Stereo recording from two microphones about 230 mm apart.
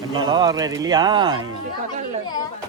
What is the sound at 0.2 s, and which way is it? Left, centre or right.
Speech, centre.